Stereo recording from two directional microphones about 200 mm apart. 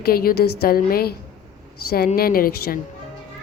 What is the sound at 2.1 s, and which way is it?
Speech, 45° left (ahead or behind).